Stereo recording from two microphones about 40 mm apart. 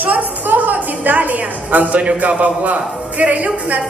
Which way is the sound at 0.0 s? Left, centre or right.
Right.